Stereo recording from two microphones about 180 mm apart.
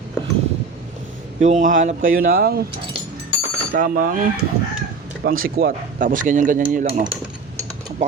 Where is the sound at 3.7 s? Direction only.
50° right (ahead or behind).